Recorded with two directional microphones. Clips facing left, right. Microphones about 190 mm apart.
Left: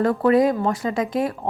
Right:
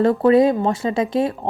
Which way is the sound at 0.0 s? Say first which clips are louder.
Right 3 dB; 25° right (ahead or behind).